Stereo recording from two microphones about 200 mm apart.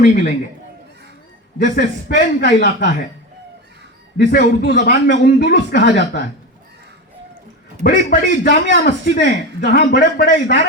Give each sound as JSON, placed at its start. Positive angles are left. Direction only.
{"t": 0.0, "sound": "a man's voice", "side_deg": 40}
{"t": 1.5, "sound": "a man's voice", "side_deg": 50}
{"t": 4.2, "sound": "a man's voice", "side_deg": 50}
{"t": 7.9, "sound": "a man's voice", "side_deg": 45}
{"t": 9.6, "sound": "speech", "side_deg": 55}
{"t": 10.0, "sound": "speech", "side_deg": 40}